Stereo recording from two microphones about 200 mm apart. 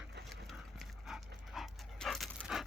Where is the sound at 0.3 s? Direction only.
Centre (ahead or behind).